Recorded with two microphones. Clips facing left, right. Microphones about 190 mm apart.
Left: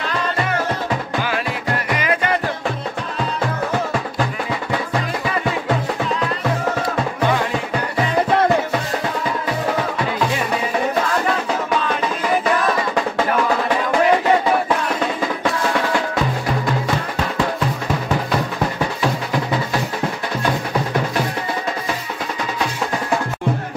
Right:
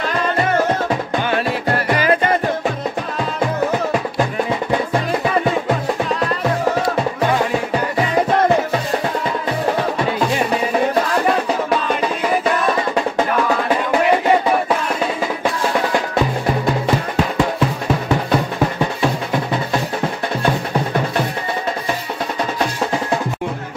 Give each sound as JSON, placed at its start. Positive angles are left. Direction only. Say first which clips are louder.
{"t": 1.9, "sound": "music", "louder": "right 5 dB", "side_deg": -35}